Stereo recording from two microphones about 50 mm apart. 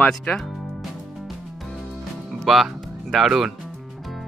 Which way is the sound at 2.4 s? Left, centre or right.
Centre.